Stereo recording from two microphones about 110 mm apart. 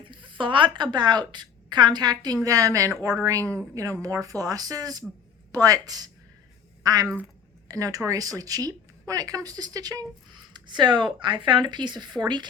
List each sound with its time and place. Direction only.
0.0 s a woman's voice: 50° right (ahead or behind)